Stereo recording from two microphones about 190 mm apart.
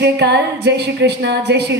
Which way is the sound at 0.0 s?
60° right (ahead or behind).